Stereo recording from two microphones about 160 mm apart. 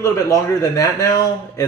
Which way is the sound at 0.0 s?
20° left (ahead or behind).